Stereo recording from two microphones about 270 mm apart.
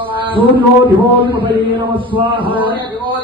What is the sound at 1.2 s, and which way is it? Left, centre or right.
Mantra, centre.